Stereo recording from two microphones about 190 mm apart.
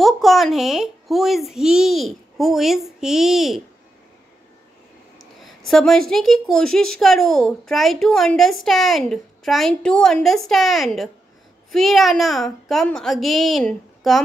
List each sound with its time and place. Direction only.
0.0 s a woman's voice: centre (ahead or behind)
5.4 s a woman's voice: centre (ahead or behind)